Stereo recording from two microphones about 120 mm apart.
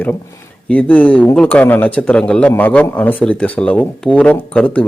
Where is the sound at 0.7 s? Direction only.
15° left (ahead or behind).